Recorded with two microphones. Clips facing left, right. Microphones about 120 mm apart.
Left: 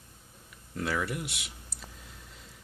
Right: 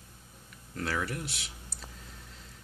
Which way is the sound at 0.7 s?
Centre (ahead or behind).